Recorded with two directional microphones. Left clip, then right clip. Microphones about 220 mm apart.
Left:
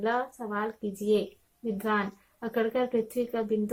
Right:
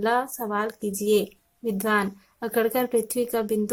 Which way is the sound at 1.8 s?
45° right (ahead or behind).